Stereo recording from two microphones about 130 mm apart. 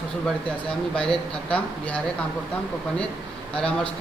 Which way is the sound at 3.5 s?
5° left (ahead or behind).